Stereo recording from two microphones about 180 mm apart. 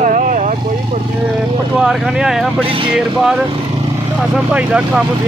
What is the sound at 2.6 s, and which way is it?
Speech, 30° right (ahead or behind).